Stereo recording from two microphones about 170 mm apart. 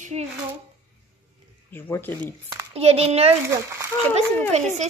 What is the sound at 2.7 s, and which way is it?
Speech, 35° right (ahead or behind).